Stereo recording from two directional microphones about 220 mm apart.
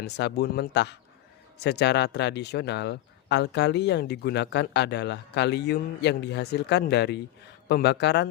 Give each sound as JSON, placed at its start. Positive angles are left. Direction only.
{"t": 0.0, "sound": "speech", "side_deg": 50}